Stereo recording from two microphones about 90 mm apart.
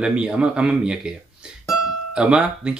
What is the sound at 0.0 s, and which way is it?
Speech, 10° right (ahead or behind).